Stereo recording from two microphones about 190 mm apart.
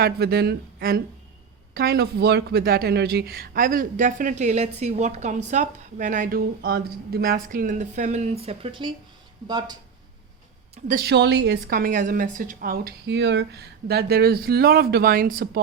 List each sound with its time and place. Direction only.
0.0 s a woman's voice: 55° right (ahead or behind); by 9.7 s 20° right (ahead or behind)
10.8 s a woman's voice: 55° right (ahead or behind)